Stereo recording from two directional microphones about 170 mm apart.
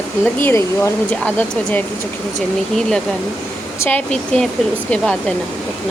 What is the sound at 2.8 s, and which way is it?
Speech, 5° left (ahead or behind).